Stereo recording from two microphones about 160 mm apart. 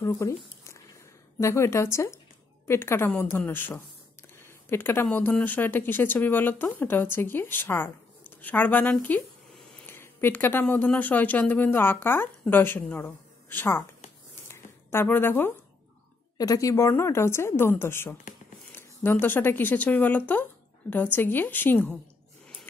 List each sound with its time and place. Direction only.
0.0 s speech: 15° left (ahead or behind)
14.5 s a sound: 15° left (ahead or behind)
16.3 s speech: 20° left (ahead or behind)